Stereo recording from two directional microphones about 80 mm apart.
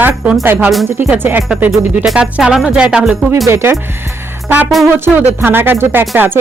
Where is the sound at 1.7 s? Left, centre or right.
Centre.